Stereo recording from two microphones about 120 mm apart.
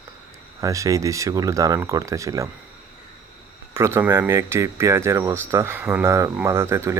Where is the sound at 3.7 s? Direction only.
20° right (ahead or behind).